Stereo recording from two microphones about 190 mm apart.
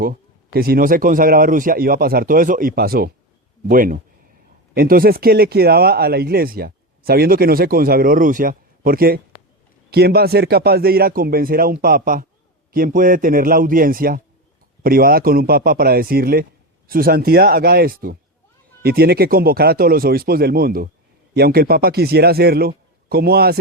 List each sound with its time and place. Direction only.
0.0 s a man's voice: 50° right (ahead or behind)